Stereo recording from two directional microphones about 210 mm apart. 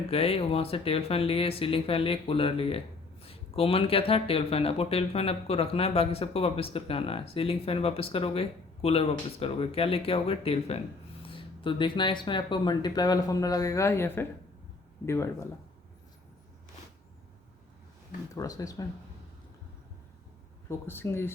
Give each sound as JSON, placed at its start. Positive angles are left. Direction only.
{"t": 0.1, "sound": "speech", "side_deg": 30}
{"t": 18.3, "sound": "speech", "side_deg": 15}
{"t": 20.7, "sound": "speech", "side_deg": 10}